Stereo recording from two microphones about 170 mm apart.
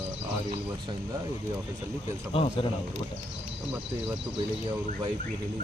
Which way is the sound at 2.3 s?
35° left (ahead or behind).